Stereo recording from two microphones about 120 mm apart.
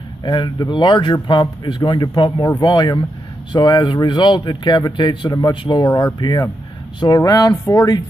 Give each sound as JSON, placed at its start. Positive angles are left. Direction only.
{"t": 0.2, "sound": "a man's voice", "side_deg": 40}